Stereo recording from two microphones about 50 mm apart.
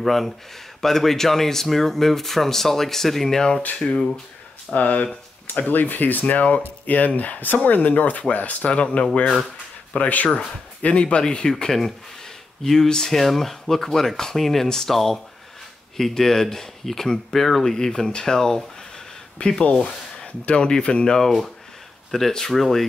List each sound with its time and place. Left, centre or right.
0.0 s speech: centre
3.6 s speech: left
9.2 s speech: centre
9.9 s speech: left; by 22.8 s centre